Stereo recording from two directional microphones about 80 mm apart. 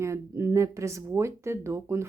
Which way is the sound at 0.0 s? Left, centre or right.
Right.